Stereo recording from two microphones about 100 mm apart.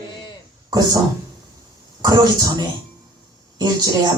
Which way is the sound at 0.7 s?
40° right (ahead or behind).